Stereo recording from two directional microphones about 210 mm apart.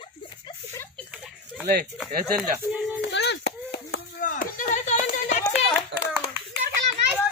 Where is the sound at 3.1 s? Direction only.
55° left (ahead or behind).